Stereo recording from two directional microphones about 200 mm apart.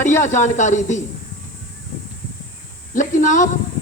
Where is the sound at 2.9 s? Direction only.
40° left (ahead or behind).